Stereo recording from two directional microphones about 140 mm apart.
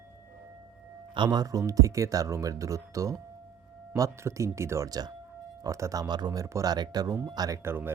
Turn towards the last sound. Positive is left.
turn(degrees=-15)  # may be behind; listen again after turning